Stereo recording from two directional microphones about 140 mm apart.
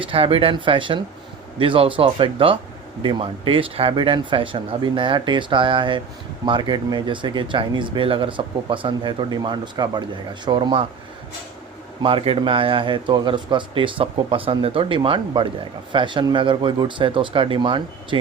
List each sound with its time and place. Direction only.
0.0 s a man's voice: 40° right (ahead or behind)
12.0 s a man's voice: 40° right (ahead or behind)